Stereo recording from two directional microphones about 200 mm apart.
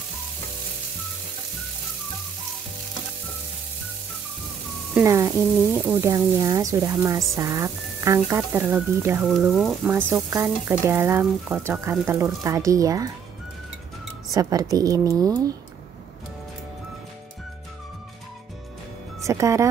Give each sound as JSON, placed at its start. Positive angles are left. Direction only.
{"t": 4.9, "sound": "speech", "side_deg": -15}
{"t": 9.5, "sound": "speech", "side_deg": 0}
{"t": 9.8, "sound": "speech", "side_deg": -10}
{"t": 14.3, "sound": "speech", "side_deg": -15}
{"t": 19.2, "sound": "speech", "side_deg": -15}